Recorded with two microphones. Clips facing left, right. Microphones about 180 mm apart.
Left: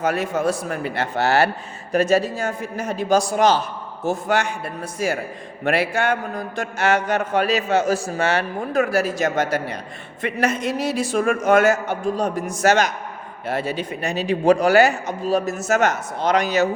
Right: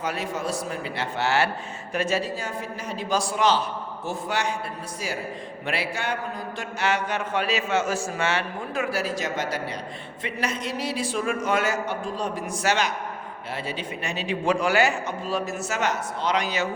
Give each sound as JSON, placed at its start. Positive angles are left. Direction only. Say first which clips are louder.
{"t": 0.0, "sound": "a man's voice", "louder": "left 8 dB", "side_deg": 50}